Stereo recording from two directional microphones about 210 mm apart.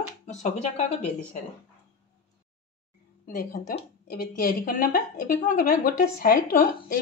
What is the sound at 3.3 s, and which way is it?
A woman's voice, 45° left (ahead or behind).